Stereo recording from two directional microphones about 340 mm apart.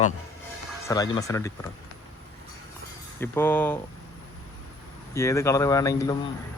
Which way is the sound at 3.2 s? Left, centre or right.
Centre.